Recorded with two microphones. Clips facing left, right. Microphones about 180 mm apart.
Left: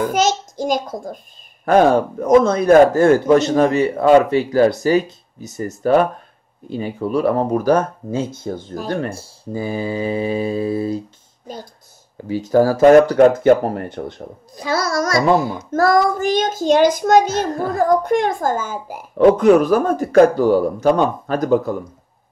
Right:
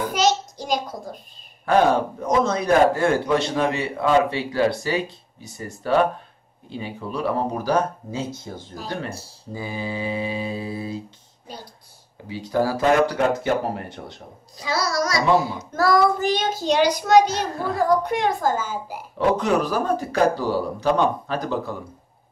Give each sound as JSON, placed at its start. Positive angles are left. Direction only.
{"t": 0.1, "sound": "a child's voice", "side_deg": 45}